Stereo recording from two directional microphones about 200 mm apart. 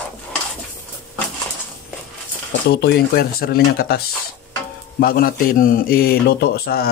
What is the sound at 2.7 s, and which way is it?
Speech, 50° left (ahead or behind).